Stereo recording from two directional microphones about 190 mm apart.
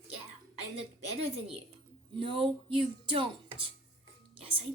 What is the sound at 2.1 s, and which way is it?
Speech, 25° right (ahead or behind).